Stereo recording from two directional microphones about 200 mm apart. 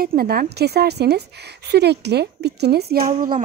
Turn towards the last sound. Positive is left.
turn(degrees=-45)  # may be behind; listen again after turning